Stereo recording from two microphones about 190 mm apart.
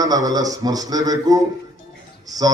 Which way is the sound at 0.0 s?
20° right (ahead or behind).